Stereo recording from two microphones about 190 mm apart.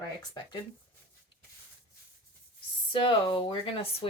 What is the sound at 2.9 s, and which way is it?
Speech, 25° left (ahead or behind).